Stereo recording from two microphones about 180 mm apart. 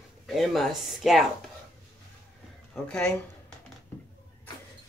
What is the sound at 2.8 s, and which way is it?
Speech, 5° left (ahead or behind).